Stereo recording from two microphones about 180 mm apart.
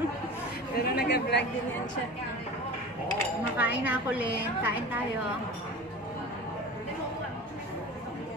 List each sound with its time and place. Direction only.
0.7 s speech: 65° left (ahead or behind)
3.5 s a woman's voice: 10° right (ahead or behind)